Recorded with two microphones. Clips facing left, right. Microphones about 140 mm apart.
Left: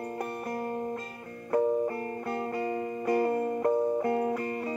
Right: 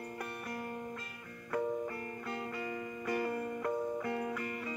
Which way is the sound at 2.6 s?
35° left (ahead or behind).